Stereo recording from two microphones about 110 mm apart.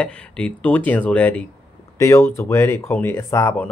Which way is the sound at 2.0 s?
25° left (ahead or behind).